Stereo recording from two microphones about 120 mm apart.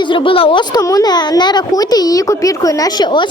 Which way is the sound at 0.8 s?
30° left (ahead or behind).